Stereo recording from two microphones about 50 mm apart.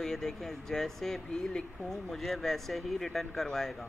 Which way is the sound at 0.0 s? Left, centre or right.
Centre.